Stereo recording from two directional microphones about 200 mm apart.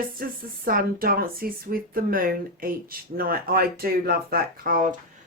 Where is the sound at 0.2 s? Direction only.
50° right (ahead or behind).